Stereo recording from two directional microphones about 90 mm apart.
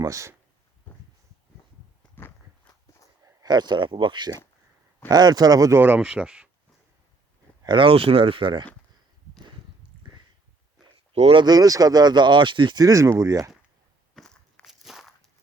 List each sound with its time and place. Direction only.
0.0 s speech: 35° right (ahead or behind)
3.4 s speech: 50° right (ahead or behind)
5.8 s speech: 10° right (ahead or behind)
7.6 s speech: 65° right (ahead or behind)
10.8 s a sound: 5° right (ahead or behind)
11.4 s speech: 45° right (ahead or behind); by 12.8 s 65° right (ahead or behind)
12.8 s speech: 35° right (ahead or behind)
14.2 s walk: 5° left (ahead or behind)